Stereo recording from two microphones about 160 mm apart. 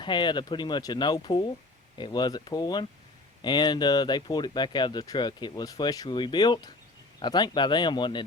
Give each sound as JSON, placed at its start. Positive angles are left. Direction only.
{"t": 0.0, "sound": "speech", "side_deg": 30}